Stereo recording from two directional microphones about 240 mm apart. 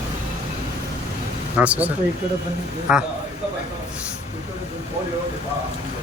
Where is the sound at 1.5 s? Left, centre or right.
Centre.